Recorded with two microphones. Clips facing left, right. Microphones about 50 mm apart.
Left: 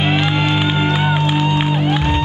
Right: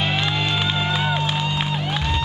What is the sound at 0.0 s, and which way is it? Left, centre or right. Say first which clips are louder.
Music: left 6 dB; left.